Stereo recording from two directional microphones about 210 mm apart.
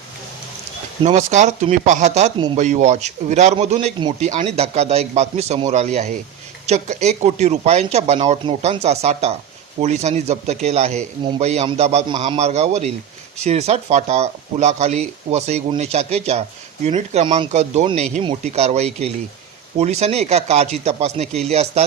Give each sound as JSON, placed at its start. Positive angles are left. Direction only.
{"t": 1.0, "sound": "speech", "side_deg": -35}